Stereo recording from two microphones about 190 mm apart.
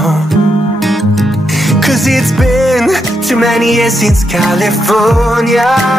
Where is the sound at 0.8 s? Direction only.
Centre (ahead or behind).